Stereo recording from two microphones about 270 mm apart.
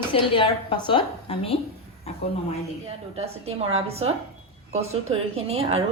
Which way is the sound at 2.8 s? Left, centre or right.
Right.